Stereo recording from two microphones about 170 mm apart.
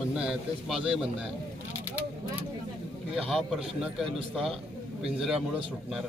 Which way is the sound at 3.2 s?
Centre (ahead or behind).